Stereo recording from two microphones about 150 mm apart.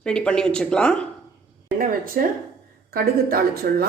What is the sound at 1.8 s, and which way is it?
A woman's voice, 70° right (ahead or behind).